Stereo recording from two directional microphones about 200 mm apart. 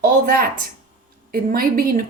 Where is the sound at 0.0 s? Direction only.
45° right (ahead or behind).